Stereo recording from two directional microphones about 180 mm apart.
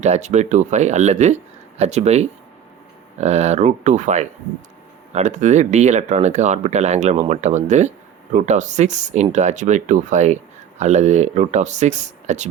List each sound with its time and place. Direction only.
0.0 s speech: 40° right (ahead or behind)